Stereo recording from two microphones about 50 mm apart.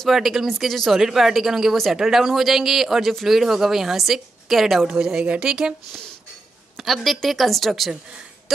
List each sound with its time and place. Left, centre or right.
0.0 s speech: centre
4.8 s speech: centre
6.8 s speech: centre
8.5 s a sound: centre